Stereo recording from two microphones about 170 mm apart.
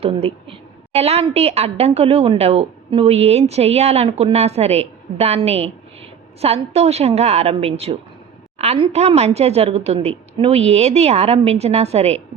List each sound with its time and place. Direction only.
0.0 s a woman's voice: 35° right (ahead or behind)